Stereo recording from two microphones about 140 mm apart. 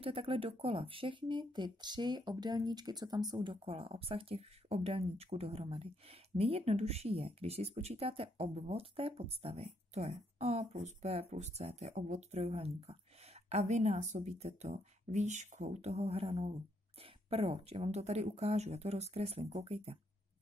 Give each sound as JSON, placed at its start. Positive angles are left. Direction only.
{"t": 0.0, "sound": "speech", "side_deg": -40}